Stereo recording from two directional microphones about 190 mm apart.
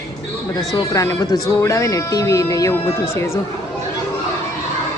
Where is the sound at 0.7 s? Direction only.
15° left (ahead or behind).